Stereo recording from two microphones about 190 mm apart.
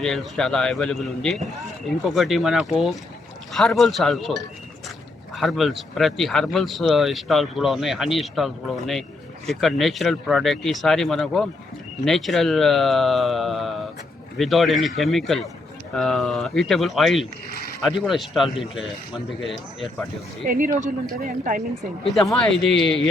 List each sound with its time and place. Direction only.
0.0 s speech: 5° left (ahead or behind)
17.5 s a sound: 50° left (ahead or behind)
17.8 s speech: centre (ahead or behind)
20.5 s speech: 45° right (ahead or behind)
21.8 s speech: centre (ahead or behind)